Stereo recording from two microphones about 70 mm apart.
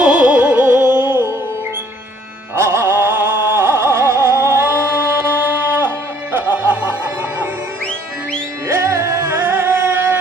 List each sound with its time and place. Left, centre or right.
0.0 s music: centre; by 1.4 s right
2.6 s a sound: right
6.3 s music: right
8.6 s music: right